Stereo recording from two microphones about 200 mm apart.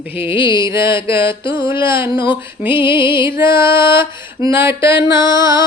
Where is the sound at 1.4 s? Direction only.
25° left (ahead or behind).